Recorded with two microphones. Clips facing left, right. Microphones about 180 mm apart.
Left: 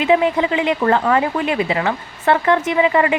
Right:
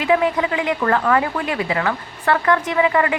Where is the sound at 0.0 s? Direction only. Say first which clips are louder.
Left 2 dB; 20° left (ahead or behind).